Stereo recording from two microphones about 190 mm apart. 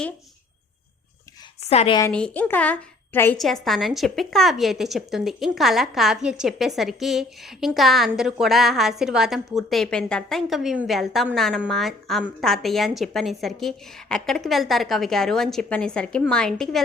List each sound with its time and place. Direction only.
1.7 s a woman's voice: 35° left (ahead or behind)
2.0 s a woman's voice: 5° left (ahead or behind)